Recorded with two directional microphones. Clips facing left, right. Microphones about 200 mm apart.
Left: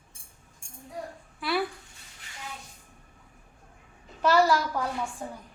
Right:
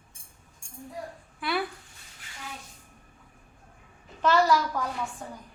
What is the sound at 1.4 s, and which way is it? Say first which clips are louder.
Speech: left 1 dB; centre (ahead or behind).